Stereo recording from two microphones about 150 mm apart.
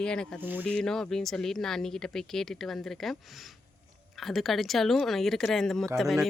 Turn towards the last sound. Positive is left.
turn(degrees=0)  # may be behind; listen again after turning